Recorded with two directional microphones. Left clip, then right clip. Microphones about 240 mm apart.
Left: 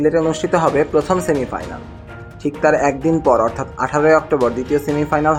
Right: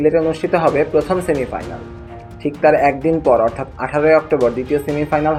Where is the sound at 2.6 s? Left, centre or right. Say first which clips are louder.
Right 2 dB; centre.